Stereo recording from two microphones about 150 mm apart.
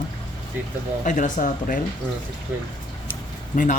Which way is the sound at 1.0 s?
60° left (ahead or behind).